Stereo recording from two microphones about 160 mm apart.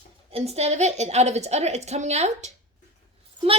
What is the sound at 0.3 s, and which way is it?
A woman's voice, 40° right (ahead or behind).